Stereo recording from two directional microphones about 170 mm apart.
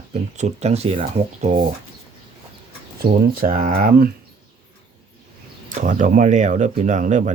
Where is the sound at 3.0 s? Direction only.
60° right (ahead or behind).